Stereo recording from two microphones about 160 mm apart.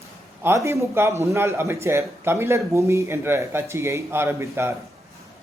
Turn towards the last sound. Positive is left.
turn(degrees=-15)  # may be behind; listen again after turning